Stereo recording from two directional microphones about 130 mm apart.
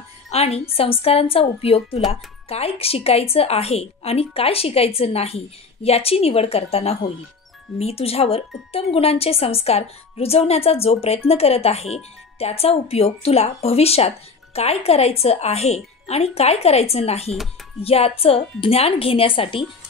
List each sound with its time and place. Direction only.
0.3 s speech: 50° left (ahead or behind)